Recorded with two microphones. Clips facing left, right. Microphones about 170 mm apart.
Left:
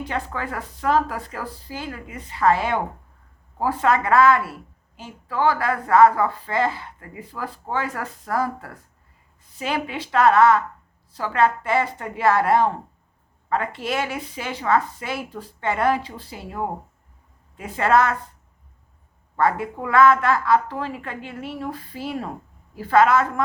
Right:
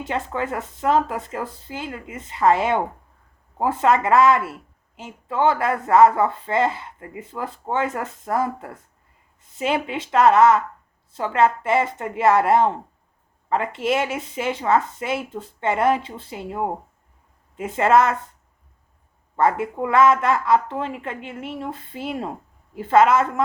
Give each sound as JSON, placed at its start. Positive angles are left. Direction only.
{"t": 0.0, "sound": "speech", "side_deg": -20}
{"t": 19.4, "sound": "speech", "side_deg": -25}